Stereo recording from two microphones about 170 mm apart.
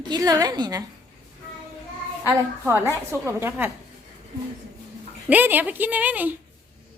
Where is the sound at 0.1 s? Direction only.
20° right (ahead or behind).